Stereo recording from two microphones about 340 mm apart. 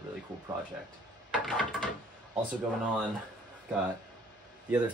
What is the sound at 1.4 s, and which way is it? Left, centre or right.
Door, centre.